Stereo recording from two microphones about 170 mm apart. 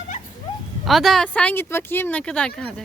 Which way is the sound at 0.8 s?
Centre (ahead or behind).